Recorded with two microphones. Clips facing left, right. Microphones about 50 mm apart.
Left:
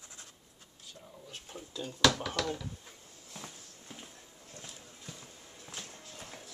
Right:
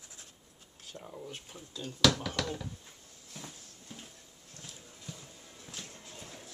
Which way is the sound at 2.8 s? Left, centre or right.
Centre.